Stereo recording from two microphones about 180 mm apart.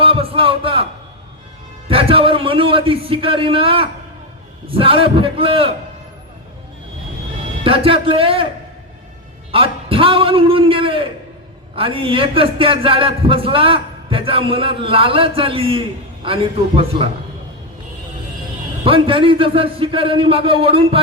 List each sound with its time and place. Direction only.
0.0 s a man's voice: 30° right (ahead or behind)
1.9 s a man's voice: 30° right (ahead or behind)
7.6 s a man's voice: 30° right (ahead or behind)
9.5 s a man's voice: 30° right (ahead or behind)
18.9 s a man's voice: 30° right (ahead or behind)